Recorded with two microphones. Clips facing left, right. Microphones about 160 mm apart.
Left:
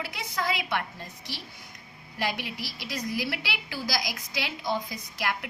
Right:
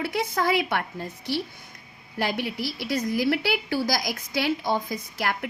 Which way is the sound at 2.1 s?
50° right (ahead or behind).